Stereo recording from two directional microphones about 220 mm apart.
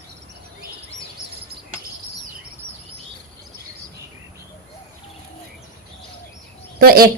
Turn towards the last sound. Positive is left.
turn(degrees=-45)  # may be behind; listen again after turning